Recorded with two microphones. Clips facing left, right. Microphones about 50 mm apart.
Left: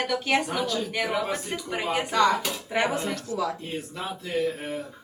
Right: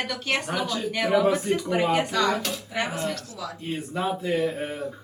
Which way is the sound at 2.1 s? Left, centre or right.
Left.